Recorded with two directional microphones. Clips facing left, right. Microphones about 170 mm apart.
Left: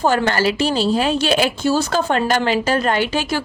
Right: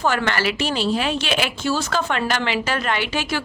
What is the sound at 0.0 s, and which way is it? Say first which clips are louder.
A woman's voice: left 4 dB; 35° left (ahead or behind).